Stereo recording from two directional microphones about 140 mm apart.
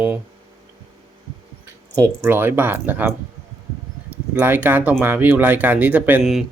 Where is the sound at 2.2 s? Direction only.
15° right (ahead or behind).